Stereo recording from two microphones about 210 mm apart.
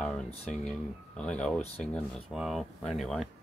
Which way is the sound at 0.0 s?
5° left (ahead or behind).